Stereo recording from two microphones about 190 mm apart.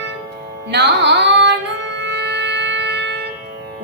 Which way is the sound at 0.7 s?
65° right (ahead or behind).